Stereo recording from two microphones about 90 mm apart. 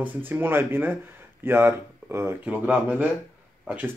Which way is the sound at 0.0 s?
25° right (ahead or behind).